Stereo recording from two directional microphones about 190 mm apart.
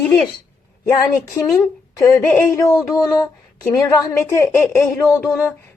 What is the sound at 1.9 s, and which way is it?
A woman's voice, 15° left (ahead or behind).